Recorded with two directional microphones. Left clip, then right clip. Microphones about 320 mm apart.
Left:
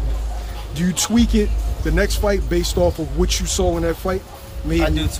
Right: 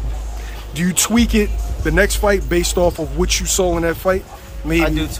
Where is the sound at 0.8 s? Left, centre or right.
Centre.